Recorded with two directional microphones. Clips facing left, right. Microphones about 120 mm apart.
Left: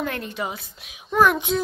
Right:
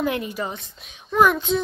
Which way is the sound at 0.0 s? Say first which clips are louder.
Right 4 dB; 5° right (ahead or behind).